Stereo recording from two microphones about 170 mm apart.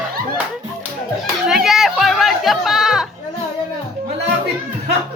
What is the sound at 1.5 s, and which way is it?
Music, centre (ahead or behind).